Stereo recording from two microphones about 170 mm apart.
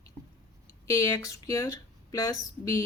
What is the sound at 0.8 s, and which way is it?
Speech, 20° left (ahead or behind).